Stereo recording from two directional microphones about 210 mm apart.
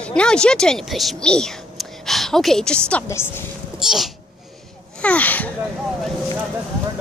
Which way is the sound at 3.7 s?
Centre (ahead or behind).